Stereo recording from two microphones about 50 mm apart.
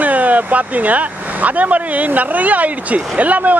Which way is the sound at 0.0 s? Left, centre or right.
Right.